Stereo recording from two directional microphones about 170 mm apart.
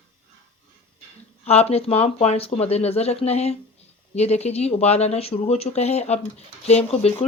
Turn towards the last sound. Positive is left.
turn(degrees=35)  # may be behind; listen again after turning